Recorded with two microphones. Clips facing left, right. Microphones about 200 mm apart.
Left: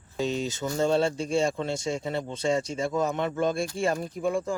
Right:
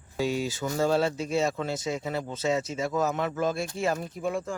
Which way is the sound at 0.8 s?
25° left (ahead or behind).